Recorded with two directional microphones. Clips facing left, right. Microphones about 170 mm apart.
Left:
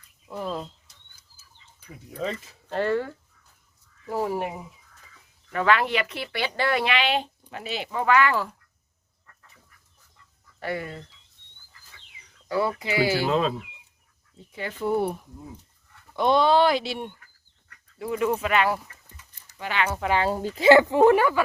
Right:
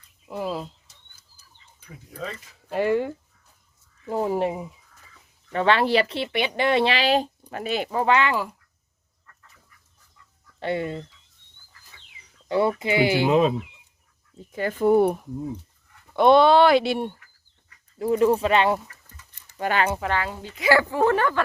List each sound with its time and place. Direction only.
0.3 s a sound: 10° right (ahead or behind)
2.6 s speech: 10° right (ahead or behind); by 8.0 s 45° right (ahead or behind)
8.0 s speech: 25° right (ahead or behind)
10.6 s speech: 25° right (ahead or behind)
12.5 s speech: 25° right (ahead or behind)
14.5 s speech: 45° right (ahead or behind)
16.1 s speech: 65° right (ahead or behind)
18.0 s speech: 35° right (ahead or behind)
19.5 s speech: 45° right (ahead or behind)
20.3 s speech: 40° left (ahead or behind)
20.7 s speech: 20° left (ahead or behind)